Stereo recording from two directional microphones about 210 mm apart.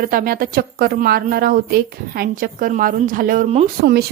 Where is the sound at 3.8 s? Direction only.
45° right (ahead or behind).